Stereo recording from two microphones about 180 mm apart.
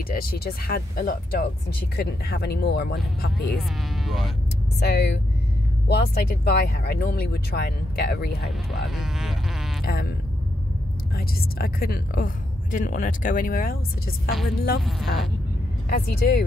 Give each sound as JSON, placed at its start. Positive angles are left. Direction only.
{"t": 0.1, "sound": "speech", "side_deg": 55}
{"t": 3.5, "sound": "insect", "side_deg": 0}
{"t": 4.7, "sound": "speech", "side_deg": 65}
{"t": 8.5, "sound": "speech", "side_deg": 0}
{"t": 9.8, "sound": "speech", "side_deg": 55}
{"t": 11.1, "sound": "speech", "side_deg": 55}
{"t": 12.7, "sound": "speech", "side_deg": 45}
{"t": 14.9, "sound": "speech", "side_deg": 0}
{"t": 15.9, "sound": "speech", "side_deg": 60}